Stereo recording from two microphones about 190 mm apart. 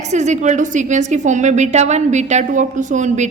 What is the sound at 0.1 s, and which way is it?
A woman's voice, 35° right (ahead or behind).